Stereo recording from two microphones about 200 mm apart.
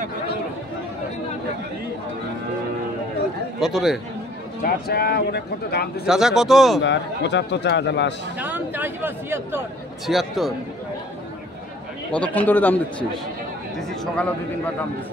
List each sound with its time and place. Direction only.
3.6 s speech: centre (ahead or behind)
4.8 s speech: 50° left (ahead or behind)
6.0 s speech: centre (ahead or behind)
6.8 s speech: 60° left (ahead or behind)
8.4 s speech: 10° right (ahead or behind)
12.1 s a man's voice: 5° left (ahead or behind)